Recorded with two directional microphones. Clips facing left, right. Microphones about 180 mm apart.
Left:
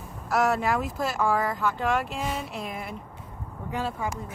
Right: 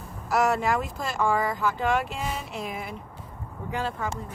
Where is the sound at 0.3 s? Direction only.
Centre (ahead or behind).